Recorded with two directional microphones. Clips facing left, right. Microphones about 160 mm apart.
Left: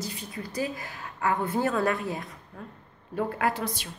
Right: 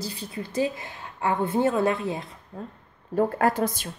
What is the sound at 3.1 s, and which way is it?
Speech, 40° right (ahead or behind).